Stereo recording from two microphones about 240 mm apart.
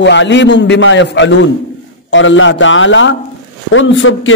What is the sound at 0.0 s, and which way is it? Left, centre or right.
A man's voice, left.